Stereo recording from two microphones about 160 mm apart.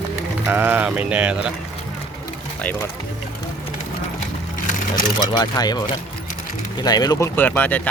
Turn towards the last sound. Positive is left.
turn(degrees=10)  # may be behind; listen again after turning